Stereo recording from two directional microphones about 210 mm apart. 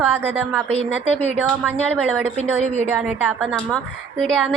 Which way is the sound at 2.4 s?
30° right (ahead or behind).